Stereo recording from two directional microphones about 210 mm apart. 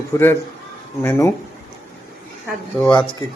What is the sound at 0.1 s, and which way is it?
A man's voice, 10° left (ahead or behind).